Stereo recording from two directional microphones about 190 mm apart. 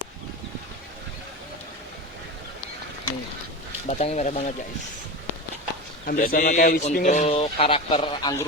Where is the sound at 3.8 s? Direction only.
35° left (ahead or behind).